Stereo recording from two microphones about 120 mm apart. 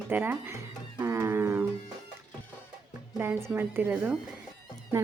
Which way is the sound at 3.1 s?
20° right (ahead or behind).